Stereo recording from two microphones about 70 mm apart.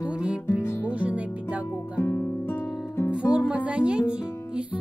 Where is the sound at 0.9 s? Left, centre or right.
Centre.